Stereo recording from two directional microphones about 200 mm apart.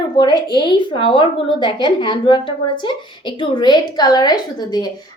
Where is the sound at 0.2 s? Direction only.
20° left (ahead or behind).